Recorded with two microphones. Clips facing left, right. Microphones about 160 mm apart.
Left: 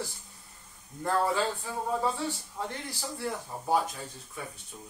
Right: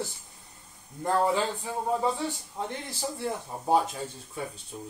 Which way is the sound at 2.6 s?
20° right (ahead or behind).